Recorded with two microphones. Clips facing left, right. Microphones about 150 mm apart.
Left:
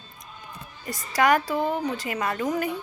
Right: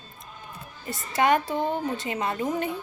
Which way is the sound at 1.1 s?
25° right (ahead or behind).